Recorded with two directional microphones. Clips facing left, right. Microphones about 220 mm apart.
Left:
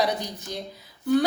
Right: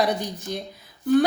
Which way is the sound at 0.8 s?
50° right (ahead or behind).